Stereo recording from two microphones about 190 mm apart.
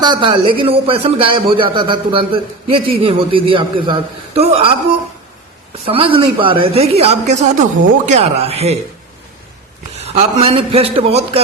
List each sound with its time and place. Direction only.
0.0 s a man's voice: 25° right (ahead or behind)
5.8 s a woman's voice: 30° right (ahead or behind)
10.2 s a woman's voice: 30° right (ahead or behind)